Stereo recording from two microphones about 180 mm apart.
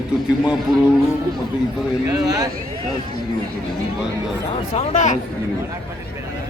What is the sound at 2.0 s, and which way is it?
Speech, 20° right (ahead or behind).